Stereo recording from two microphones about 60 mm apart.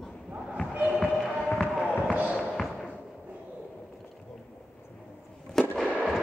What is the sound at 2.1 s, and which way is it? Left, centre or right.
Music, right.